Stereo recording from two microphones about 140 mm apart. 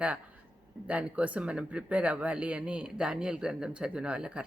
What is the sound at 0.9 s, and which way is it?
Speech, 10° right (ahead or behind).